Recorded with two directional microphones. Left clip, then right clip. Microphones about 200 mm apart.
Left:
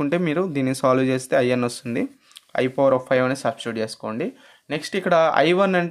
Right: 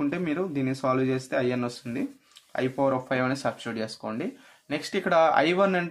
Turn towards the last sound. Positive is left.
turn(degrees=30)  # may be behind; listen again after turning